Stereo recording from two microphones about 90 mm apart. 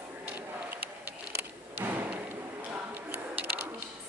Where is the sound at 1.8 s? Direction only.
20° right (ahead or behind).